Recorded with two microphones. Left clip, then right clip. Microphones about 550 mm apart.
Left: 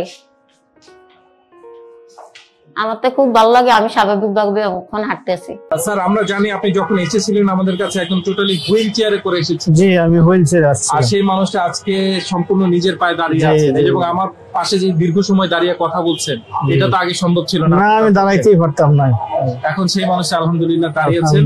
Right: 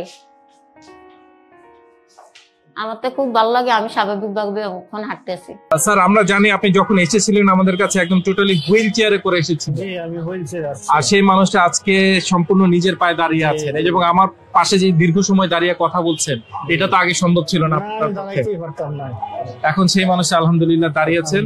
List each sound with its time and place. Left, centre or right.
2.7 s a woman's voice: centre
5.9 s speech: right
9.8 s speech: left
11.0 s speech: right
15.5 s speech: right
17.8 s speech: left
19.6 s speech: right